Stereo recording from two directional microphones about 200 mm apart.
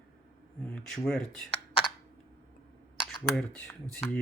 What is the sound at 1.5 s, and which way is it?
Computer keyboard, 30° left (ahead or behind).